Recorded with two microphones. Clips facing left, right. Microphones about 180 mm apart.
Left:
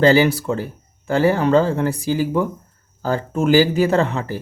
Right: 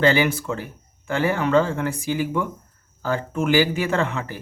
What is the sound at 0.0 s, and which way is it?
Speech, 35° left (ahead or behind).